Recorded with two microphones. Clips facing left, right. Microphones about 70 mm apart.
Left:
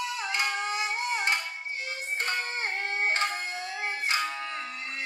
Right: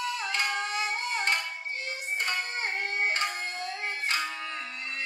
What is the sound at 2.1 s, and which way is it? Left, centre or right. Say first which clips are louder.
Music: left 1 dB; left.